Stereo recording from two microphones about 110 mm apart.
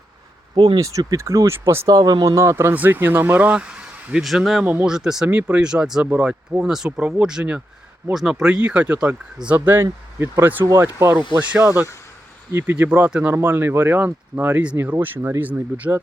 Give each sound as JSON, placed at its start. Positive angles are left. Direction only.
{"t": 0.5, "sound": "speech", "side_deg": -45}
{"t": 0.8, "sound": "speech", "side_deg": -30}
{"t": 1.9, "sound": "speech", "side_deg": -40}
{"t": 4.6, "sound": "speech", "side_deg": -15}
{"t": 9.6, "sound": "speech", "side_deg": -20}